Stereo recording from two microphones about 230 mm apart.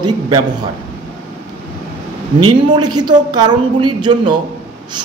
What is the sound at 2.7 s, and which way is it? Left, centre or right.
A man's voice, centre.